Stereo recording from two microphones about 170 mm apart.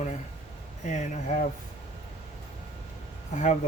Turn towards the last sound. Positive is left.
turn(degrees=45)  # may be behind; listen again after turning